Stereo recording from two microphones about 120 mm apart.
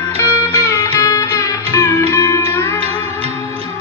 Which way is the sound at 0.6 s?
25° left (ahead or behind).